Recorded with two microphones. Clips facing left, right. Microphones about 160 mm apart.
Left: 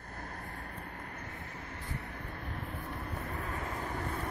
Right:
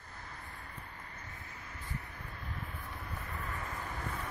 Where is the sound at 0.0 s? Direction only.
55° left (ahead or behind).